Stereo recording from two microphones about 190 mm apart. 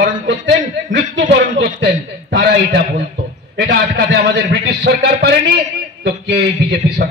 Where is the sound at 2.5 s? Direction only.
60° right (ahead or behind).